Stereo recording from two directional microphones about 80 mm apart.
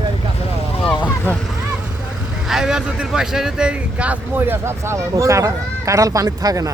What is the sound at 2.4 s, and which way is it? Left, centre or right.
Speech, centre.